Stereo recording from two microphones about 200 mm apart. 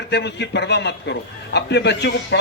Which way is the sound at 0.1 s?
60° left (ahead or behind).